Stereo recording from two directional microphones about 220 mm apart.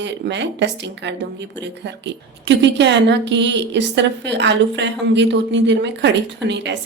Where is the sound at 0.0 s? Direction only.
50° right (ahead or behind).